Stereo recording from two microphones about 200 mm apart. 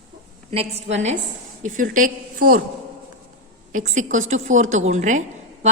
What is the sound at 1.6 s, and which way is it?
Speech, 40° right (ahead or behind).